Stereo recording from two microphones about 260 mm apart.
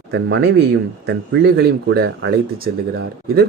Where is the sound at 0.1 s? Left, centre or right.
Right.